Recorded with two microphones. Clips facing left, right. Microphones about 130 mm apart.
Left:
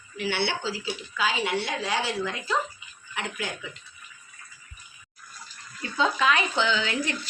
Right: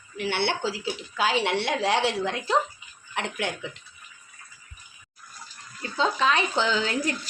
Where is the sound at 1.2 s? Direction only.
70° right (ahead or behind).